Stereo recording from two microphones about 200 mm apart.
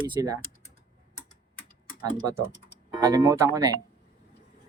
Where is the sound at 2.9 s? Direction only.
20° right (ahead or behind).